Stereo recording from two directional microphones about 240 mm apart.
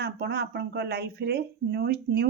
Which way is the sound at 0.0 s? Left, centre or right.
Right.